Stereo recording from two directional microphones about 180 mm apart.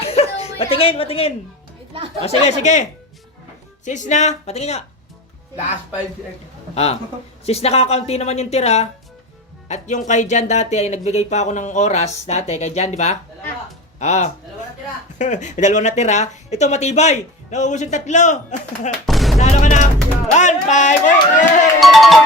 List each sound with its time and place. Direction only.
0.0 s chuckle: 35° left (ahead or behind)
2.2 s speech: 35° left (ahead or behind)
3.8 s speech: 40° left (ahead or behind)
6.7 s speech: 35° left (ahead or behind)
19.0 s a sound: centre (ahead or behind)
19.4 s speech: 40° left (ahead or behind)
20.3 s music: 40° left (ahead or behind)
21.8 s music: centre (ahead or behind)